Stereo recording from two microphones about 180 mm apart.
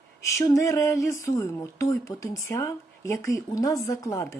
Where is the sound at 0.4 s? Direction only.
15° left (ahead or behind).